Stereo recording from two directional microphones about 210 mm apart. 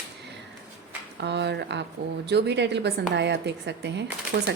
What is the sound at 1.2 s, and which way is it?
A woman's voice, 55° right (ahead or behind).